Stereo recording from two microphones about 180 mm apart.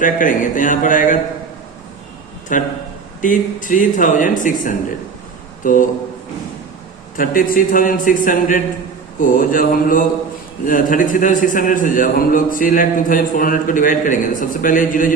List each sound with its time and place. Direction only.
0.0 s a man's voice: 45° left (ahead or behind)
2.5 s a man's voice: 45° left (ahead or behind)
7.2 s a man's voice: 50° left (ahead or behind)